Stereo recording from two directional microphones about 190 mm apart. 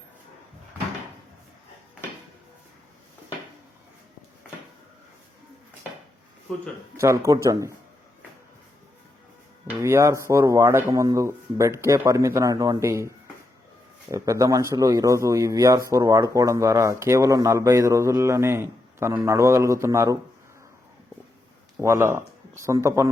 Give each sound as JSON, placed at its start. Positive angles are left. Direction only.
{"t": 6.9, "sound": "speech", "side_deg": -15}
{"t": 9.6, "sound": "speech", "side_deg": -15}
{"t": 21.8, "sound": "speech", "side_deg": -15}